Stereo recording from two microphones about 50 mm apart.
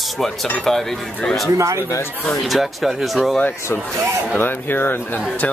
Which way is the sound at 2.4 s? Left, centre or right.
Centre.